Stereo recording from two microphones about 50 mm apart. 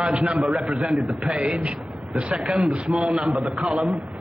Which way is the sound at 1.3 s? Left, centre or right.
Right.